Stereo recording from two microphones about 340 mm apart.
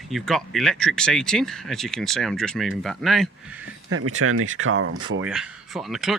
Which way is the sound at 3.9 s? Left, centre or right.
Right.